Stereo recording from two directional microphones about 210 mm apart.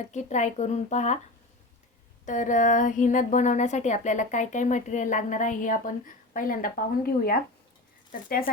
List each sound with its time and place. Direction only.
0.1 s speech: 35° left (ahead or behind)
2.2 s speech: 35° left (ahead or behind)